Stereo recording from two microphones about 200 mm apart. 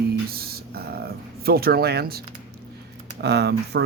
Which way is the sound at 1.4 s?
50° right (ahead or behind).